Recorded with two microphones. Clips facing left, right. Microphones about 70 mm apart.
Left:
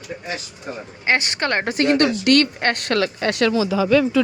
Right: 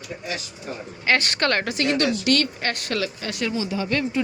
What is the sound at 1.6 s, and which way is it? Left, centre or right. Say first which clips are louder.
Speech: left 5 dB; left.